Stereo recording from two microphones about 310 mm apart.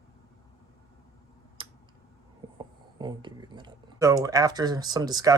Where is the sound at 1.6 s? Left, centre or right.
Centre.